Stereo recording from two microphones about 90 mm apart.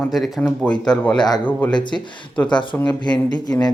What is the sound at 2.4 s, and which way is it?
Speech, 60° left (ahead or behind).